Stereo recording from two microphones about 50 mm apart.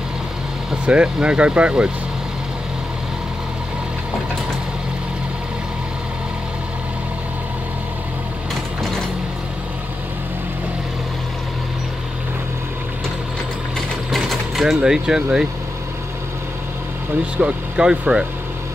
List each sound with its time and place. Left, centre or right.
0.8 s speech: right
13.7 s sewing machine: centre
14.8 s speech: centre
17.4 s speech: centre